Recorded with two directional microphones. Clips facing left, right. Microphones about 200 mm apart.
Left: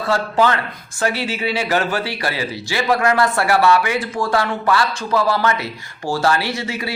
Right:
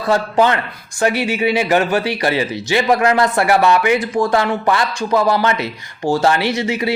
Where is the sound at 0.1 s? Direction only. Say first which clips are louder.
Right 3 dB; 20° right (ahead or behind).